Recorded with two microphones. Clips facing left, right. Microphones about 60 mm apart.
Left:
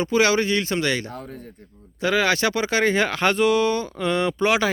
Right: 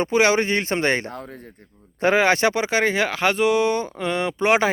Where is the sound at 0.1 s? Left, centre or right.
Right.